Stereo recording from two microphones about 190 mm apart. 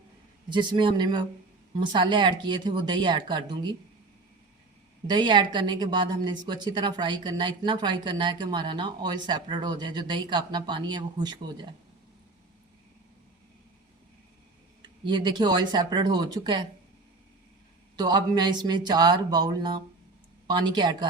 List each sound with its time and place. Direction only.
0.5 s speech: 25° right (ahead or behind)
5.0 s speech: 25° right (ahead or behind)
14.8 s speech: 25° right (ahead or behind)
17.9 s speech: 20° right (ahead or behind)